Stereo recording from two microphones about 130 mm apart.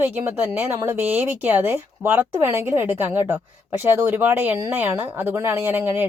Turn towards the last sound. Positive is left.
turn(degrees=-15)  # may be behind; listen again after turning